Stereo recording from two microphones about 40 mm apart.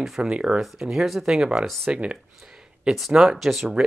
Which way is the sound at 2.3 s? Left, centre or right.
Centre.